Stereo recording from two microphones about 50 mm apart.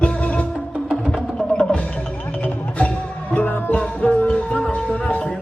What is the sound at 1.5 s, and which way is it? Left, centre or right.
Music, left.